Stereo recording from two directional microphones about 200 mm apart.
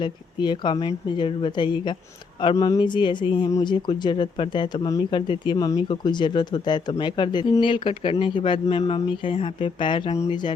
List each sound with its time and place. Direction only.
0.0 s speech: 20° left (ahead or behind)